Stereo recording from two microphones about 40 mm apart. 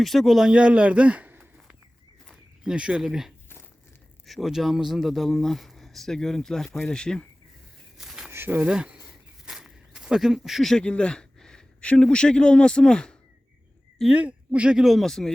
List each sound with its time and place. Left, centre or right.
0.0 s speech: centre
0.5 s a man's voice: right
2.6 s speech: right
3.0 s speech: centre
7.9 s a sound: centre
8.6 s speech: right
9.5 s walk: centre
10.2 s speech: centre
10.8 s a sound: left
11.8 s a man's voice: left
14.1 s speech: right
14.8 s speech: centre
15.0 s speech: centre